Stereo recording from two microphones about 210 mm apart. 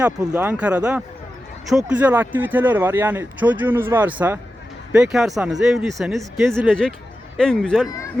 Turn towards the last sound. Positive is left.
turn(degrees=0)  # may be behind; listen again after turning